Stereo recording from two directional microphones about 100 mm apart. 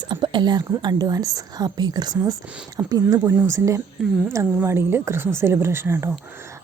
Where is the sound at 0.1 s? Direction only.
50° right (ahead or behind).